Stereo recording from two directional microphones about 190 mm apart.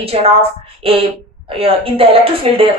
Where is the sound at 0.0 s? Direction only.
30° right (ahead or behind).